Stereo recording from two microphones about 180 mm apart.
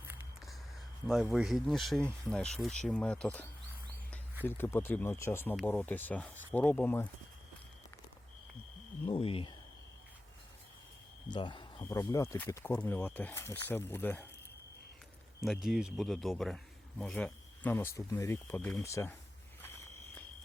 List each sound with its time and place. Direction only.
1.0 s speech: centre (ahead or behind)
4.4 s speech: 10° left (ahead or behind)
9.0 s speech: 30° left (ahead or behind)
11.3 s speech: 25° left (ahead or behind); by 14.3 s 10° left (ahead or behind)
15.6 s speech: centre (ahead or behind); by 19.1 s 15° left (ahead or behind)